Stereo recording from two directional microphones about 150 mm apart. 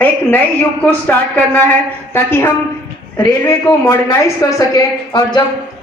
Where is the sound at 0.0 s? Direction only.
10° left (ahead or behind).